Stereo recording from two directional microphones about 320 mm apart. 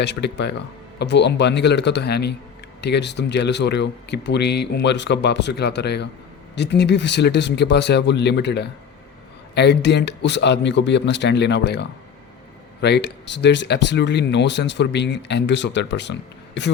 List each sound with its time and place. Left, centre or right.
0.0 s speech: left